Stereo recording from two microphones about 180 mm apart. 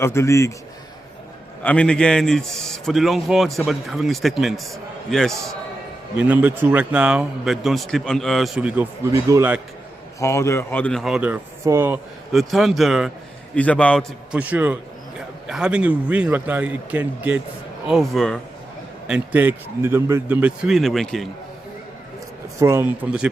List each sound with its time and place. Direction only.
0.0 s a man's voice: 15° left (ahead or behind)
1.6 s a man's voice: 5° left (ahead or behind); by 9.6 s 10° right (ahead or behind)
10.2 s speech: 15° left (ahead or behind); by 11.9 s 15° right (ahead or behind)
12.3 s a man's voice: centre (ahead or behind)
14.3 s a man's voice: 10° right (ahead or behind)
22.6 s a man's voice: 15° right (ahead or behind)